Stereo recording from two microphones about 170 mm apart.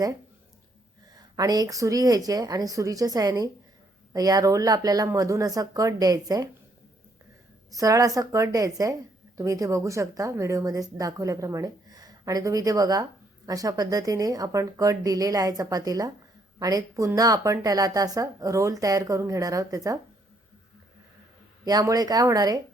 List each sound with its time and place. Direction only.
1.1 s speech: 20° right (ahead or behind)
7.7 s speech: 20° right (ahead or behind)
21.6 s speech: 20° right (ahead or behind)